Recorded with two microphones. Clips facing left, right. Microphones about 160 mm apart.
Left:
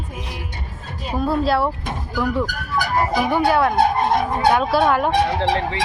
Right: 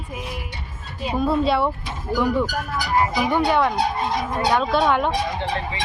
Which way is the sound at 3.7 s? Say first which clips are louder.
Left 6 dB; 55° left (ahead or behind).